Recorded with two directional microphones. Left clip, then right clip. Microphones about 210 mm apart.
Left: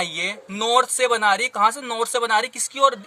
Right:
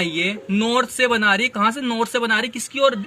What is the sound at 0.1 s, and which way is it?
Speech, 50° left (ahead or behind).